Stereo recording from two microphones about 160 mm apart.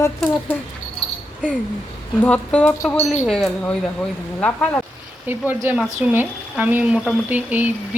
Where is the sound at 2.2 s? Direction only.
10° left (ahead or behind).